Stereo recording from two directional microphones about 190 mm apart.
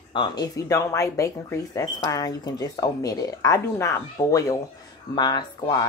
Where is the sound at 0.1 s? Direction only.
25° left (ahead or behind).